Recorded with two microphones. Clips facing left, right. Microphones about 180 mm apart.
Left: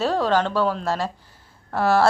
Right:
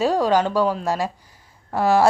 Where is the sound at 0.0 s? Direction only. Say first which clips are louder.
Right 2 dB; 10° right (ahead or behind).